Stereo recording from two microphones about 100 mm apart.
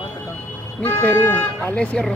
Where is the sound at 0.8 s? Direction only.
20° left (ahead or behind).